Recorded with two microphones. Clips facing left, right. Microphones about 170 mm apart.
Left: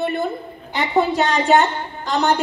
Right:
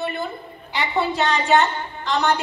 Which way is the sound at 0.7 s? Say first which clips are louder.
Left 4 dB; 45° left (ahead or behind).